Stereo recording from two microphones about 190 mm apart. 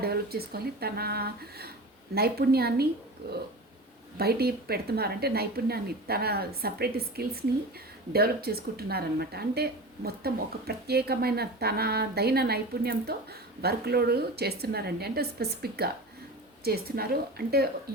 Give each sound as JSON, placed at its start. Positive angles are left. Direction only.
{"t": 0.0, "sound": "a woman's voice", "side_deg": -55}
{"t": 4.2, "sound": "a woman's voice", "side_deg": -55}